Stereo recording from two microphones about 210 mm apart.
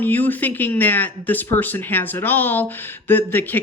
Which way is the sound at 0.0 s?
10° left (ahead or behind).